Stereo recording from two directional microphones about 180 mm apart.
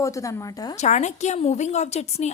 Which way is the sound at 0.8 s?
40° left (ahead or behind).